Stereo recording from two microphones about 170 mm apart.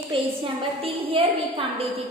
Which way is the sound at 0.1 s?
30° right (ahead or behind).